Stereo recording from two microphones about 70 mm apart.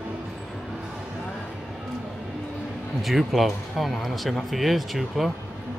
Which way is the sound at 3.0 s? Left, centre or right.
Centre.